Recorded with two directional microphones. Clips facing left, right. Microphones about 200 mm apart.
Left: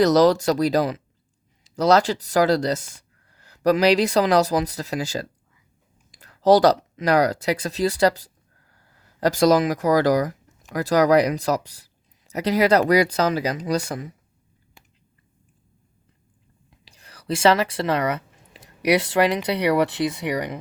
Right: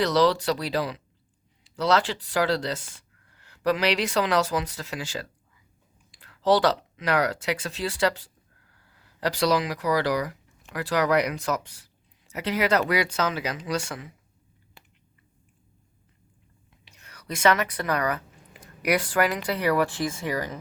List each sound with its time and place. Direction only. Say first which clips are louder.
0.0 s speech: left 6 dB; 45° left (ahead or behind)
16.8 s a sound: left 8 dB; 35° left (ahead or behind)
18.9 s speech: left 5 dB; 25° left (ahead or behind)
19.9 s speech: left 5 dB; 65° left (ahead or behind)
20.3 s speech: left 4 dB; 15° left (ahead or behind)